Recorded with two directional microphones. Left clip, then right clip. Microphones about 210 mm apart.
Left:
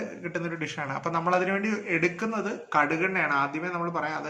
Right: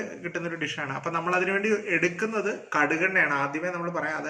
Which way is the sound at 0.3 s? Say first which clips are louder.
Right 1 dB; 50° left (ahead or behind).